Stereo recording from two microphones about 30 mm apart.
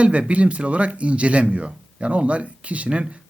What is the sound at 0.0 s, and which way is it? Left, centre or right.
Speech, right.